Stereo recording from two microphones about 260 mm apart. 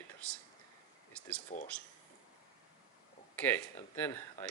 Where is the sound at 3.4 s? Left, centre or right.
Centre.